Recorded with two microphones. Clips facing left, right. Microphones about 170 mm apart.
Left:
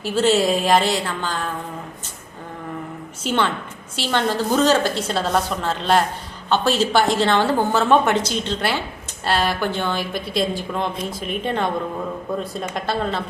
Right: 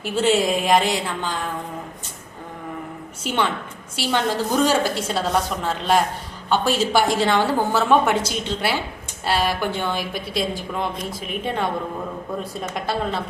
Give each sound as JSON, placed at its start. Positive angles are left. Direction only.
{"t": 0.0, "sound": "a woman's voice", "side_deg": -15}
{"t": 3.2, "sound": "a woman's voice", "side_deg": -15}
{"t": 12.7, "sound": "a woman's voice", "side_deg": -10}